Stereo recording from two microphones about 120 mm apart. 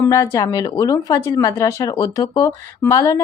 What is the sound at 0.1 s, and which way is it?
Speech, 25° left (ahead or behind).